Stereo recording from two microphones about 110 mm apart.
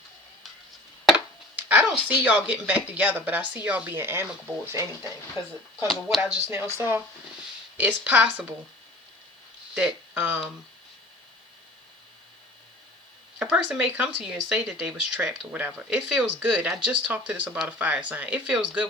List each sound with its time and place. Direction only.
1.5 s a sound: 15° right (ahead or behind)
2.0 s speech: 15° right (ahead or behind)
5.9 s speech: centre (ahead or behind)
6.5 s speech: 20° right (ahead or behind)
9.7 s speech: 15° right (ahead or behind)
13.4 s speech: 10° right (ahead or behind)